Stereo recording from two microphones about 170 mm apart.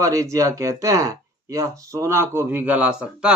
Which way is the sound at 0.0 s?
20° right (ahead or behind).